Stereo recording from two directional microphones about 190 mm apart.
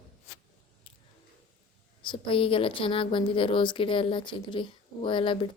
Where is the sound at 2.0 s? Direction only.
25° left (ahead or behind).